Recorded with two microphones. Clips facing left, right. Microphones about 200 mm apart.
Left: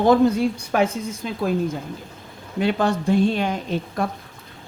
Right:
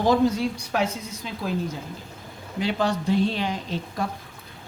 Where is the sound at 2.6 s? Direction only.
55° left (ahead or behind).